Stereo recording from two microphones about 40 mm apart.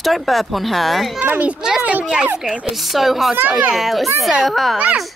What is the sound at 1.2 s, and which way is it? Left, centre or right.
Speech, right.